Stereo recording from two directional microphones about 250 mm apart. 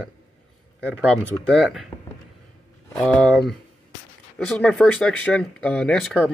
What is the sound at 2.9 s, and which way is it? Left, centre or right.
Speech, centre.